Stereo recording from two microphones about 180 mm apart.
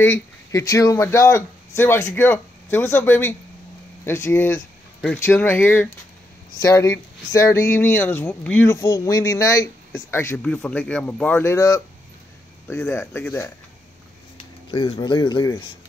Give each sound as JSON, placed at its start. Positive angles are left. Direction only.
{"t": 0.0, "sound": "speech", "side_deg": 15}
{"t": 14.7, "sound": "speech", "side_deg": 25}